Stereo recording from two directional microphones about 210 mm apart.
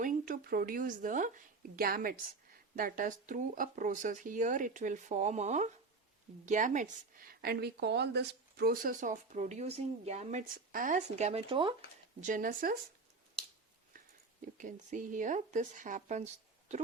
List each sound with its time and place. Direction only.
0.0 s speech: 40° right (ahead or behind); by 11.7 s 25° right (ahead or behind)
12.2 s speech: 40° right (ahead or behind)
14.4 s speech: 35° right (ahead or behind)